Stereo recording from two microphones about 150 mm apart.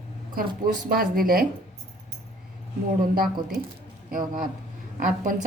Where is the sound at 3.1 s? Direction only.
75° right (ahead or behind).